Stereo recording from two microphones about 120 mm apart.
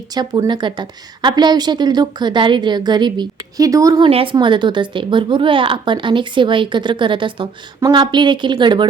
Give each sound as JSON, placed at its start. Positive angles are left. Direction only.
{"t": 0.1, "sound": "a woman's voice", "side_deg": -35}
{"t": 4.0, "sound": "a woman's voice", "side_deg": -45}